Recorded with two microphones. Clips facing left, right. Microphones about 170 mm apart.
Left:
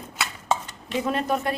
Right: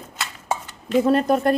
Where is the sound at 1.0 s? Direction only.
40° right (ahead or behind).